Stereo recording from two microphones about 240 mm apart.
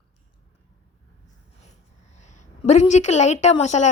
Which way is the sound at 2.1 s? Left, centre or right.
Left.